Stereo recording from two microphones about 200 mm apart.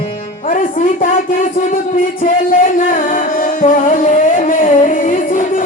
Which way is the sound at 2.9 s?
40° left (ahead or behind).